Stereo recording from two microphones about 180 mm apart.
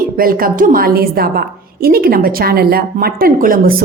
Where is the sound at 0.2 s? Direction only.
55° right (ahead or behind).